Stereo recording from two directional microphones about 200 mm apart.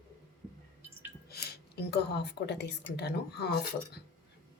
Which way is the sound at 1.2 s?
50° left (ahead or behind).